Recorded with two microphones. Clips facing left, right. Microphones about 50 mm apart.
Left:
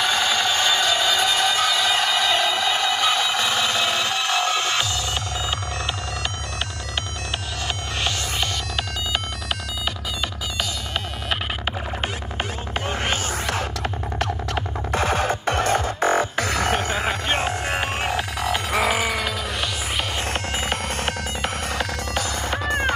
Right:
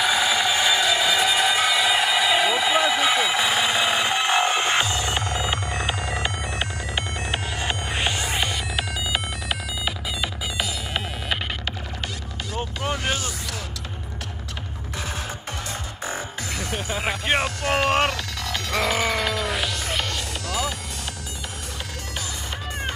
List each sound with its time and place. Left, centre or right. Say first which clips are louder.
0.0 s music: even; centre
7.6 s music: even; centre
12.9 s music: left 3 dB; left
14.2 s music: left 13 dB; left
17.5 s a sound: right 1 dB; left
17.8 s a sound: right 5 dB; right
18.1 s music: left 6 dB; centre
20.5 s music: left 3 dB; left
21.7 s music: left 8 dB; left